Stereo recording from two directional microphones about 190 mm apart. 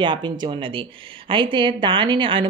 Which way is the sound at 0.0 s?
25° right (ahead or behind).